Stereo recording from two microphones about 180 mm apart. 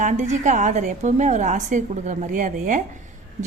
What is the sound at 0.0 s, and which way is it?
A woman's voice, 40° right (ahead or behind).